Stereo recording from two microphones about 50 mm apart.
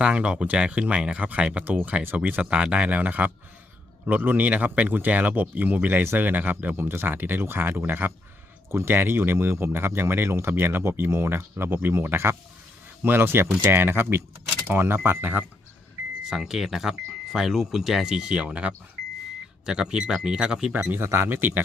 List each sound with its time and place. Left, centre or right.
0.0 s speech: right
6.7 s speech: right
8.7 s speech: right
10.5 s speech: right
13.0 s speech: right
16.3 s speech: centre
18.3 s speech: right
21.0 s speech: right